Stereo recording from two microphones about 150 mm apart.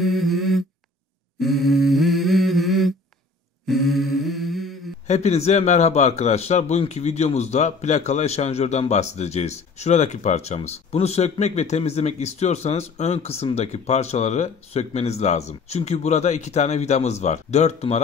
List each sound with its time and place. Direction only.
0.0 s a sound: centre (ahead or behind)
1.4 s humming: centre (ahead or behind)
3.6 s mantra: centre (ahead or behind)
5.0 s a man's voice: 50° left (ahead or behind)